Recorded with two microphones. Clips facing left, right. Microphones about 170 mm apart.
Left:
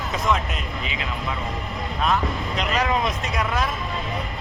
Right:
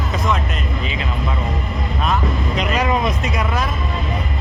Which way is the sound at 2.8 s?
10° right (ahead or behind).